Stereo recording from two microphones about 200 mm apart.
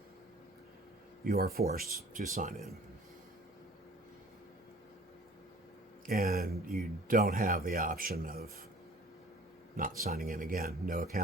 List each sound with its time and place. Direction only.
1.2 s a man's voice: 50° right (ahead or behind)
1.8 s speech: centre (ahead or behind)
2.1 s a man's voice: 40° right (ahead or behind)
6.1 s a man's voice: 50° right (ahead or behind)
9.7 s a man's voice: 45° right (ahead or behind)